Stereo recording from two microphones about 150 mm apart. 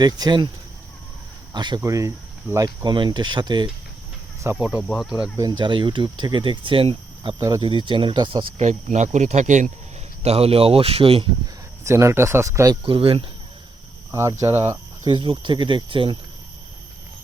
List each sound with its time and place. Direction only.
0.0 s speech: 30° right (ahead or behind)
1.5 s speech: 30° right (ahead or behind)
2.8 s speech: 30° right (ahead or behind)
4.4 s speech: 15° right (ahead or behind)
4.8 s speech: centre (ahead or behind)
5.4 s speech: 30° right (ahead or behind)
7.3 s speech: 25° right (ahead or behind)
7.7 s speech: 35° right (ahead or behind)
8.5 s speech: 50° right (ahead or behind)
10.2 s speech: 40° right (ahead or behind)
11.9 s speech: 20° right (ahead or behind)
12.8 s speech: 35° right (ahead or behind)
14.1 s speech: 20° right (ahead or behind)
15.1 s speech: 30° right (ahead or behind)